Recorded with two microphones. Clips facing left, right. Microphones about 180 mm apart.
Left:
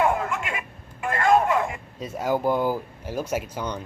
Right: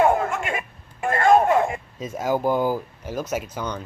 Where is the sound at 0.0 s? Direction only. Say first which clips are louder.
Right 4 dB; 35° right (ahead or behind).